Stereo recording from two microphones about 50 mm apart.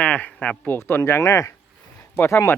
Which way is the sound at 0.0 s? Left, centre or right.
Left.